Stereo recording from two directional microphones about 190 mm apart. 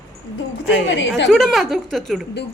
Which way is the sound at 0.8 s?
70° left (ahead or behind).